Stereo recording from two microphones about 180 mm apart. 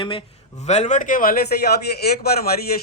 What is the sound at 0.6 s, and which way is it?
A man's voice, 40° left (ahead or behind).